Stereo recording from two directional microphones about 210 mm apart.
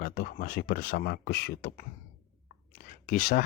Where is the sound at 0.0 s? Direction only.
45° left (ahead or behind).